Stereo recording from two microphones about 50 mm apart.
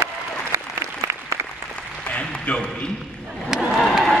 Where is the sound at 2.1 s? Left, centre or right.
Left.